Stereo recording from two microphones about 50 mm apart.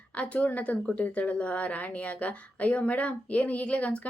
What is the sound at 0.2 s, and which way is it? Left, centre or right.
Speech, left.